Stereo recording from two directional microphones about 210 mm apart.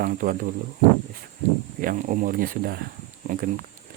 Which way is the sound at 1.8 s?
40° right (ahead or behind).